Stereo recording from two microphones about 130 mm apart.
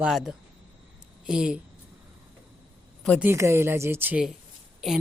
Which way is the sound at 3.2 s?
20° right (ahead or behind).